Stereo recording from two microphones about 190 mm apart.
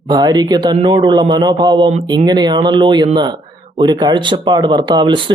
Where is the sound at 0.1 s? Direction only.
20° right (ahead or behind).